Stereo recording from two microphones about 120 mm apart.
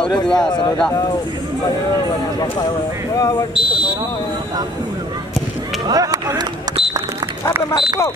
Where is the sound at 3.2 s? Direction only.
30° left (ahead or behind).